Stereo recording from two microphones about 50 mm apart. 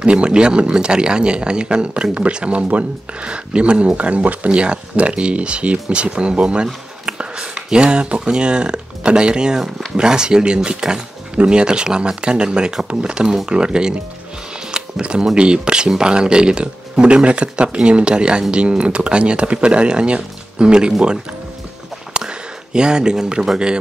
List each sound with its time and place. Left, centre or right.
0.0 s speech: centre
4.5 s speech: right
14.7 s camera: centre
15.3 s speech: centre
22.1 s speech: centre